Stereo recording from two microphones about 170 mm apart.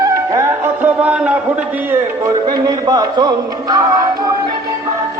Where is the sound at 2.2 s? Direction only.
20° right (ahead or behind).